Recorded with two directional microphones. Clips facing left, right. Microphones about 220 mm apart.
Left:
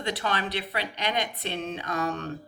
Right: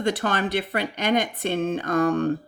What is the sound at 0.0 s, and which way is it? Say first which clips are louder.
Speech: right 6 dB; 50° right (ahead or behind).